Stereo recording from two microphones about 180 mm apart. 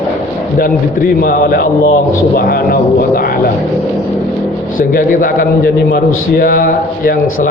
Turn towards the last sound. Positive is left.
turn(degrees=50)  # may be behind; listen again after turning